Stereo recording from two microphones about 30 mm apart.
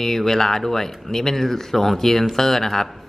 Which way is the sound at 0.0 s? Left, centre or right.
Centre.